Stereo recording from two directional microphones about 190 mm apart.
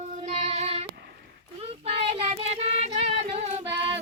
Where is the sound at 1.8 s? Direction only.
30° right (ahead or behind).